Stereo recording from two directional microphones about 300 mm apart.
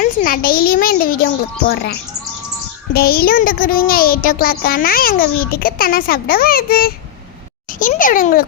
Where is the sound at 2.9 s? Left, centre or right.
Left.